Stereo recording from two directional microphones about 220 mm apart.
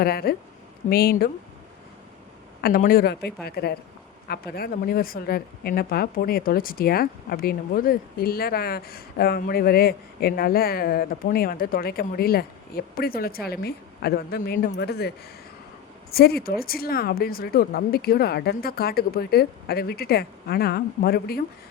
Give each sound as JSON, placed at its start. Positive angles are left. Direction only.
{"t": 0.0, "sound": "a woman's voice", "side_deg": 45}
{"t": 2.6, "sound": "a woman's voice", "side_deg": 45}
{"t": 16.1, "sound": "a woman's voice", "side_deg": 45}